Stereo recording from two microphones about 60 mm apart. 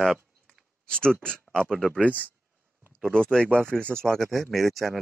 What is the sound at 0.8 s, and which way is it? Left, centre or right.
Speech, centre.